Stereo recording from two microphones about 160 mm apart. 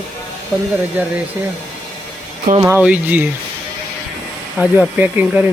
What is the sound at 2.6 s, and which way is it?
Speech, 10° right (ahead or behind).